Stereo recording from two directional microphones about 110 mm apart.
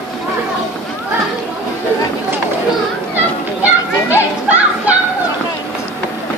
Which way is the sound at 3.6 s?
15° right (ahead or behind).